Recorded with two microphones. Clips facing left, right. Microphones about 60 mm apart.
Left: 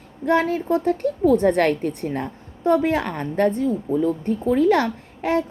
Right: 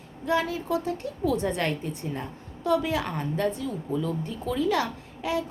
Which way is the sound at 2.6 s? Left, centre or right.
Left.